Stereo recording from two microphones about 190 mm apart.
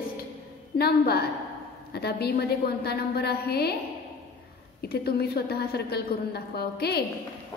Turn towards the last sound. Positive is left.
turn(degrees=55)  # may be behind; listen again after turning